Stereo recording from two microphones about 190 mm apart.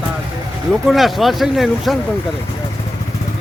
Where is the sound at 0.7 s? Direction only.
Centre (ahead or behind).